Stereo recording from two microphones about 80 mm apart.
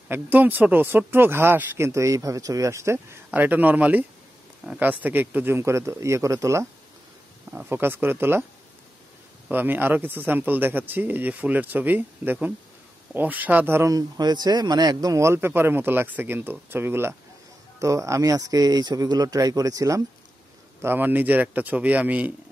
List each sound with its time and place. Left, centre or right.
0.1 s a man's voice: right
3.3 s a man's voice: right
7.7 s a man's voice: right
9.5 s a man's voice: right
13.8 s a man's voice: right
15.2 s a man's voice: right
17.7 s speech: right
20.8 s a man's voice: right